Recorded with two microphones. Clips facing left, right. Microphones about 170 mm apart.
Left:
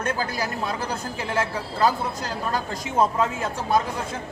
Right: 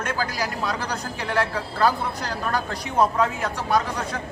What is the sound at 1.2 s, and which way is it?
Speech, 20° left (ahead or behind).